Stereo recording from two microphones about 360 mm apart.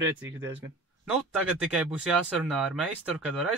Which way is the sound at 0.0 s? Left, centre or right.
Right.